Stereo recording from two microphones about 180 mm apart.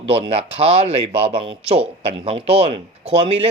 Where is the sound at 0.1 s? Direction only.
35° right (ahead or behind).